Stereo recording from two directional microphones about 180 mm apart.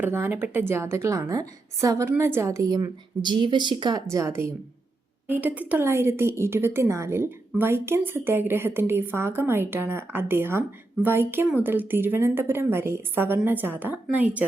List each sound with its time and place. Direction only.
0.0 s a woman's voice: 10° right (ahead or behind)